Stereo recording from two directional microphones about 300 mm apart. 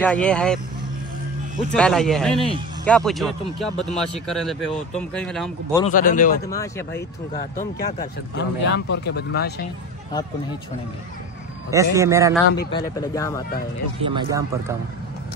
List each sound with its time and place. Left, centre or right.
0.0 s speech: centre
1.7 s speech: centre
5.9 s a man's voice: left
6.4 s speech: centre
7.3 s speech: left
11.7 s speech: centre
12.7 s speech: centre
14.0 s speech: centre